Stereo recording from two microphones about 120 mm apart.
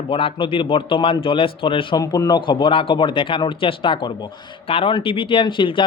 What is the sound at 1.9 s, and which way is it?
Speech, 30° left (ahead or behind).